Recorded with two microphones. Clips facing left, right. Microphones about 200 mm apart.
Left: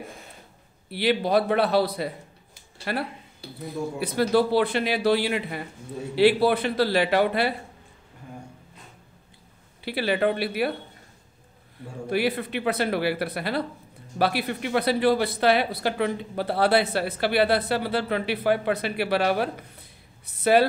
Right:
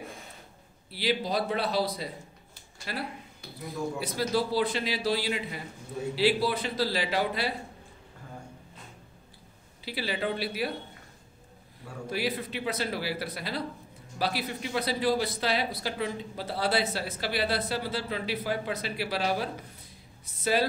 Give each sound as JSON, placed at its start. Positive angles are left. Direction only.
{"t": 0.8, "sound": "speech", "side_deg": 60}
{"t": 3.4, "sound": "a sound", "side_deg": 30}
{"t": 4.0, "sound": "speech", "side_deg": 60}
{"t": 9.8, "sound": "speech", "side_deg": 60}
{"t": 12.1, "sound": "speech", "side_deg": 60}